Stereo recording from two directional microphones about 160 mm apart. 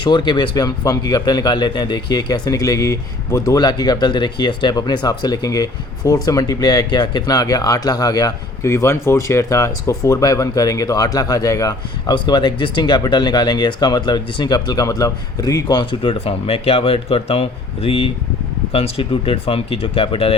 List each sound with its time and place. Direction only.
0.0 s speech: 30° left (ahead or behind)